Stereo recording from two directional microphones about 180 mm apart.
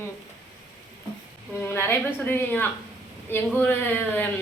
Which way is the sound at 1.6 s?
10° left (ahead or behind).